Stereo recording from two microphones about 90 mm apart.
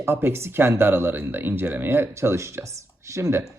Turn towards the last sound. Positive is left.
turn(degrees=-35)  # may be behind; listen again after turning